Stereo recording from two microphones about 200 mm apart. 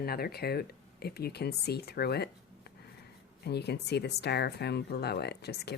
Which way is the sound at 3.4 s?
55° left (ahead or behind).